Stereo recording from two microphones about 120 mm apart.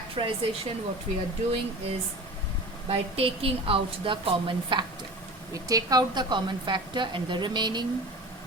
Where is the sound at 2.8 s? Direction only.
55° right (ahead or behind).